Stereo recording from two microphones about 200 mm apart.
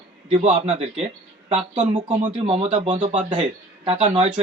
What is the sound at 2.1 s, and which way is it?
Speech, 35° right (ahead or behind).